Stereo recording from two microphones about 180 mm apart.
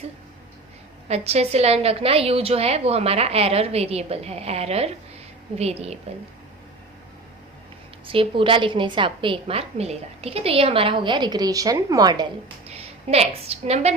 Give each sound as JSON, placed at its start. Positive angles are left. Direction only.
{"t": 1.0, "sound": "a woman's voice", "side_deg": -35}
{"t": 6.1, "sound": "a woman's voice", "side_deg": -35}
{"t": 8.0, "sound": "a woman's voice", "side_deg": -30}
{"t": 12.7, "sound": "a woman's voice", "side_deg": -35}